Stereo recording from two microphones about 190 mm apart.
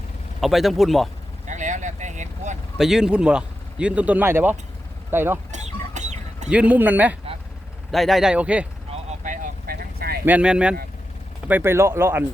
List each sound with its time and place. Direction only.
0.4 s speech: centre (ahead or behind)
1.5 s vehicle: 40° right (ahead or behind)
2.7 s speech: centre (ahead or behind)
5.5 s a sound: 40° right (ahead or behind)
6.5 s speech: 5° right (ahead or behind)
8.9 s a sound: 40° right (ahead or behind); by 10.2 s 55° right (ahead or behind)
10.2 s speech: 5° right (ahead or behind)